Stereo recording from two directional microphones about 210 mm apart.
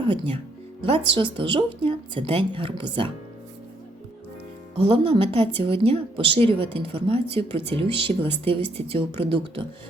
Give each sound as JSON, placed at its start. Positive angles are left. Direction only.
{"t": 0.1, "sound": "a woman's voice", "side_deg": -25}
{"t": 4.8, "sound": "a woman's voice", "side_deg": -25}